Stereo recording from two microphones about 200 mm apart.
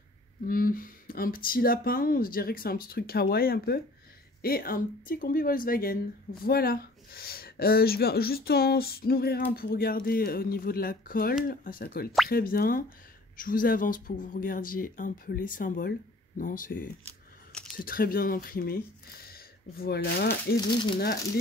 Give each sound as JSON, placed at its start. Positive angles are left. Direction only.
{"t": 0.5, "sound": "speech", "side_deg": 45}
{"t": 17.5, "sound": "a sound", "side_deg": 5}
{"t": 17.8, "sound": "speech", "side_deg": 45}